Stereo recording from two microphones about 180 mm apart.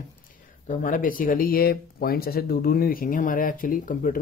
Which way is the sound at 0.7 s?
45° left (ahead or behind).